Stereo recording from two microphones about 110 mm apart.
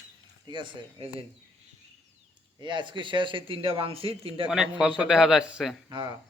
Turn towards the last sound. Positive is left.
turn(degrees=-45)  # may be behind; listen again after turning